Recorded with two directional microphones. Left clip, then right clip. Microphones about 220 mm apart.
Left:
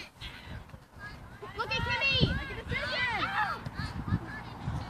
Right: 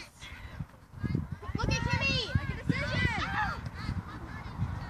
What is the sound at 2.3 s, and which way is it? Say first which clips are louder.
Run: even; 5° right (ahead or behind).